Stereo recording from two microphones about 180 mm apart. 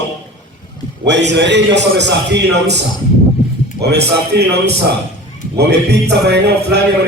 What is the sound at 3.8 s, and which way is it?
A man's voice, 65° right (ahead or behind).